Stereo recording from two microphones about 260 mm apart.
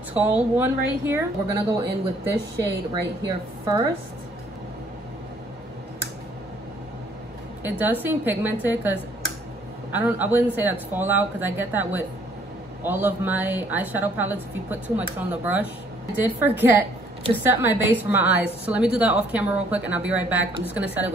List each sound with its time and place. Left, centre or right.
0.1 s a woman's voice: centre
3.3 s a woman's voice: centre
7.6 s a woman's voice: centre
9.9 s a woman's voice: centre